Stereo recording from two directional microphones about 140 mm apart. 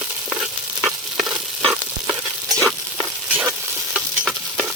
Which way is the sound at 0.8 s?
5° right (ahead or behind).